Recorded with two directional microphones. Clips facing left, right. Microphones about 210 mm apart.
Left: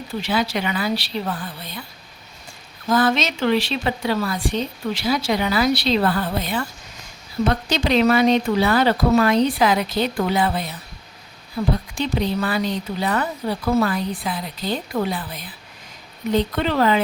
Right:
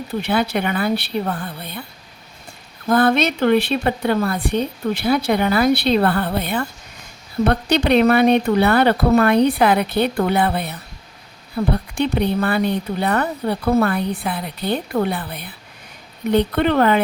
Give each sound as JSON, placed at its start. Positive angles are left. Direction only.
{"t": 0.2, "sound": "a woman's voice", "side_deg": -60}
{"t": 2.9, "sound": "a woman's voice", "side_deg": -60}